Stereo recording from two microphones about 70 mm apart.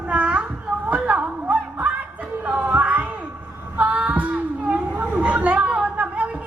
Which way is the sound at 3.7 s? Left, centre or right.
Right.